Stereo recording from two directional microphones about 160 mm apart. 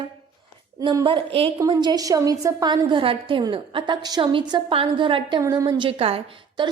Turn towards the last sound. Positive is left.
turn(degrees=-35)  # may be behind; listen again after turning